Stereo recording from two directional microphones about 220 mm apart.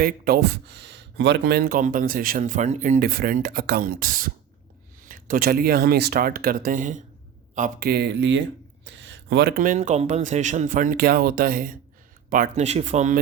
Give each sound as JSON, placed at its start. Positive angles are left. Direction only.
{"t": 0.0, "sound": "speech", "side_deg": -45}